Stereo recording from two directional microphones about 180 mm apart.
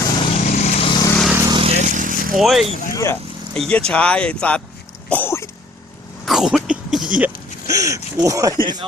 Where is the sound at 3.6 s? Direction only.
5° left (ahead or behind).